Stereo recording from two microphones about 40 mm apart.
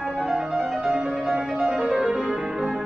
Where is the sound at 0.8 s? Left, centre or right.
Right.